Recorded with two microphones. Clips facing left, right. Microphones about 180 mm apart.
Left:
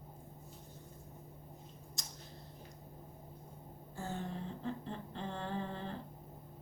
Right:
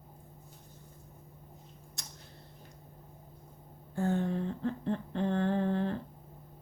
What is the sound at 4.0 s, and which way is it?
Humming, 60° right (ahead or behind).